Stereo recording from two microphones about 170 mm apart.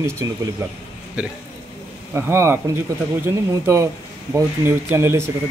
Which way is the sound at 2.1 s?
15° right (ahead or behind).